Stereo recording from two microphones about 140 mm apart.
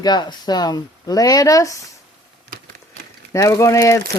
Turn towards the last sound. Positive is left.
turn(degrees=20)  # may be behind; listen again after turning